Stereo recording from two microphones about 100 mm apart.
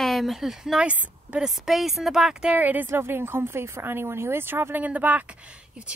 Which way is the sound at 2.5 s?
15° right (ahead or behind).